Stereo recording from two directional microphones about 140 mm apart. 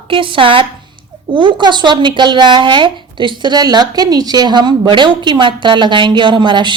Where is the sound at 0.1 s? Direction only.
40° right (ahead or behind).